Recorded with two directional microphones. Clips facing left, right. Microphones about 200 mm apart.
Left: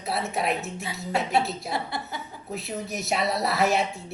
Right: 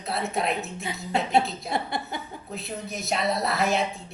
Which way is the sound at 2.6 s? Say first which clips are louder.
Left 2 dB; centre (ahead or behind).